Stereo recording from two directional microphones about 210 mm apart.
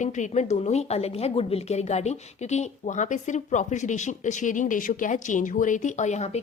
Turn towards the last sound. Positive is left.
turn(degrees=30)  # may be behind; listen again after turning